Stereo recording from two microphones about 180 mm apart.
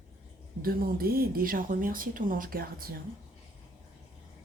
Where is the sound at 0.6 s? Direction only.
55° right (ahead or behind).